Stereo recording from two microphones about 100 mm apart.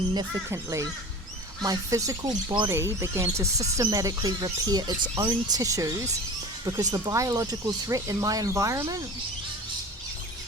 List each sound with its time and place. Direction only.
0.5 s speech: 30° right (ahead or behind)